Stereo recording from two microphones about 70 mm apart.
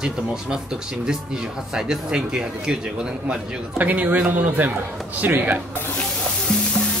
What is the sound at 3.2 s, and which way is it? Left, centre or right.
A man's voice, right.